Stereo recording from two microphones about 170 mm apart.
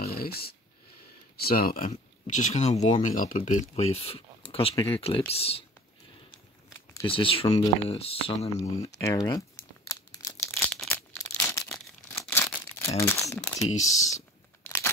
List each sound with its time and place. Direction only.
0.0 s a sound: 65° left (ahead or behind)
1.3 s speech: 60° left (ahead or behind)
1.9 s speech: 45° left (ahead or behind)
7.1 s speech: 35° left (ahead or behind)
8.5 s speech: 20° left (ahead or behind)
9.8 s crumpling: 20° left (ahead or behind)
10.3 s a sound: 5° left (ahead or behind)
11.1 s a sound: 15° left (ahead or behind)
12.9 s speech: 15° left (ahead or behind)
13.7 s speech: 40° left (ahead or behind)